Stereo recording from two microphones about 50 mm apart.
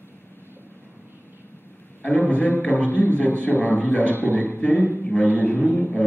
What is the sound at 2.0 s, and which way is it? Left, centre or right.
A man's voice, left.